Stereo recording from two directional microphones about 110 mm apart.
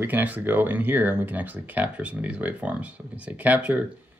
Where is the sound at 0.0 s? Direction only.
15° right (ahead or behind).